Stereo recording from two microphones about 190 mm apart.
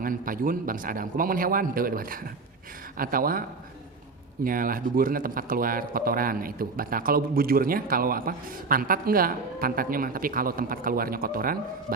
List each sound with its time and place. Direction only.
0.0 s speech: 45° right (ahead or behind)
4.4 s speech: 45° right (ahead or behind)